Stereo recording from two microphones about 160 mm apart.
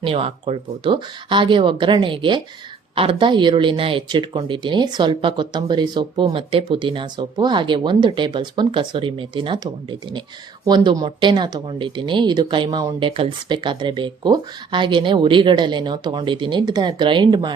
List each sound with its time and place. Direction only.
0.0 s speech: 35° right (ahead or behind)